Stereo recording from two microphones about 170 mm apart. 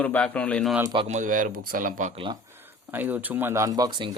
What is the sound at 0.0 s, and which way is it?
Speech, 10° left (ahead or behind).